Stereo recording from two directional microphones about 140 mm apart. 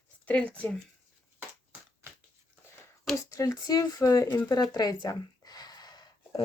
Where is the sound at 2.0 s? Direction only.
20° right (ahead or behind).